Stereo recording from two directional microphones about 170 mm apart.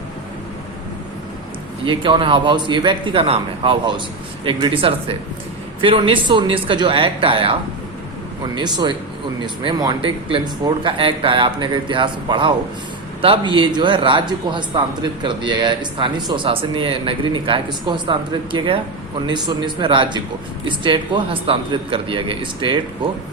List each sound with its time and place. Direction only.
1.8 s speech: 30° right (ahead or behind)
8.5 s speech: 25° right (ahead or behind)